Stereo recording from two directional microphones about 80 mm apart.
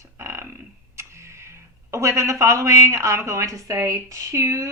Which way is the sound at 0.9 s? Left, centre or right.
Right.